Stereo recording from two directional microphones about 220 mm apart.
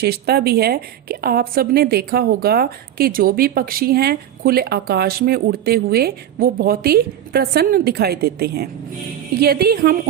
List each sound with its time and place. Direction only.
0.0 s a woman's voice: 45° right (ahead or behind)